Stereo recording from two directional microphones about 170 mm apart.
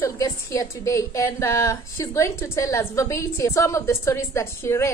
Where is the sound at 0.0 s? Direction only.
20° left (ahead or behind).